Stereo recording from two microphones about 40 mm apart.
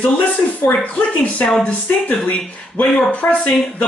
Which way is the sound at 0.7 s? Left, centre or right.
Left.